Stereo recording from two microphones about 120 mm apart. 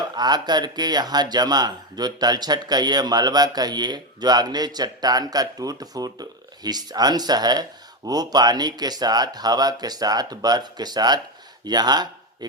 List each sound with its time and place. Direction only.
0.2 s speech: 35° right (ahead or behind)